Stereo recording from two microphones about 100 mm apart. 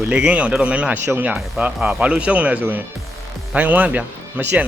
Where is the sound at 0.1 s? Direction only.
10° right (ahead or behind).